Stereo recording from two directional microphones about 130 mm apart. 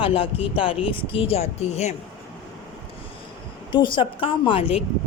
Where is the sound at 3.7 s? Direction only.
40° left (ahead or behind).